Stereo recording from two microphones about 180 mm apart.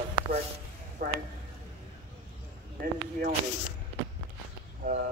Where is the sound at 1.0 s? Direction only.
55° right (ahead or behind).